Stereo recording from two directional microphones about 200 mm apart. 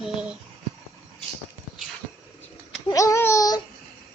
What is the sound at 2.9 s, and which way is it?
Child singing, 15° left (ahead or behind).